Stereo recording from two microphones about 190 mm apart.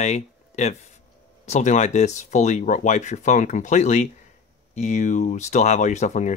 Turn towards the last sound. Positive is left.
turn(degrees=40)  # may be behind; listen again after turning